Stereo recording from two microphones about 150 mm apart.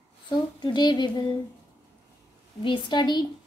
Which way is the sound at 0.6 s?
30° left (ahead or behind).